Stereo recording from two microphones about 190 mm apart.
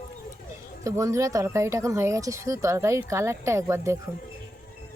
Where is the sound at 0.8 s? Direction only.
15° right (ahead or behind).